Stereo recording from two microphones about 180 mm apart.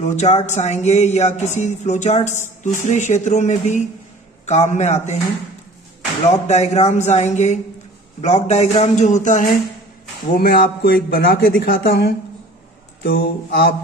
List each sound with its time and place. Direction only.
0.0 s speech: 40° left (ahead or behind)
6.2 s speech: 40° left (ahead or behind); by 13.7 s 55° left (ahead or behind)